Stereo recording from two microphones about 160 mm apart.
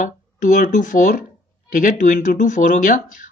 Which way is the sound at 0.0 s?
50° left (ahead or behind).